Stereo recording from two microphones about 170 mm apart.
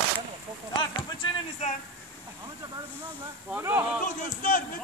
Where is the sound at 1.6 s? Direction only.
45° left (ahead or behind).